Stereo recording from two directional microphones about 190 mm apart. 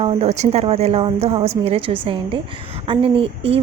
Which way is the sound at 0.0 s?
30° right (ahead or behind).